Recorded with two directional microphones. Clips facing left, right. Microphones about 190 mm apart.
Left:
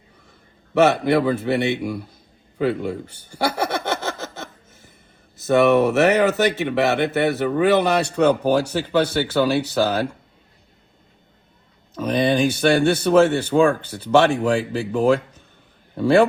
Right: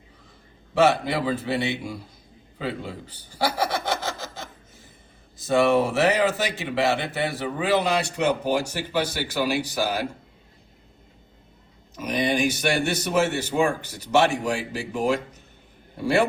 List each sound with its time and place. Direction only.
0.7 s speech: 60° left (ahead or behind)
3.6 s a sound: 60° left (ahead or behind)
5.5 s speech: 65° left (ahead or behind)
12.0 s speech: 60° left (ahead or behind)